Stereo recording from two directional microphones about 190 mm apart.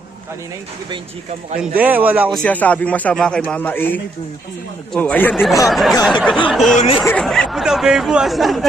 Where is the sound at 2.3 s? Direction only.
5° left (ahead or behind).